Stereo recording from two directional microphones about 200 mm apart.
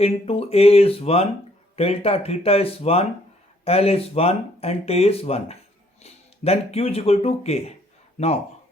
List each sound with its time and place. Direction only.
0.0 s speech: 30° left (ahead or behind)